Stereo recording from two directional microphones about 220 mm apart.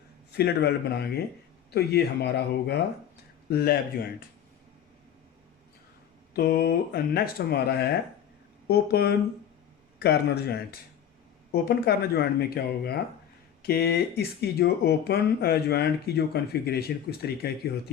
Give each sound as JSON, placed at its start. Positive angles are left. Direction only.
{"t": 0.3, "sound": "speech", "side_deg": 45}
{"t": 6.3, "sound": "speech", "side_deg": 45}